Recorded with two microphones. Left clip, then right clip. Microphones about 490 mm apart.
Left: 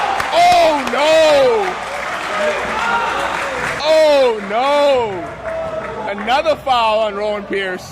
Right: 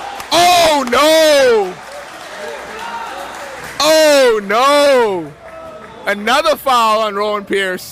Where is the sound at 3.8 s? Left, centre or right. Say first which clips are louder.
Right 2 dB; right.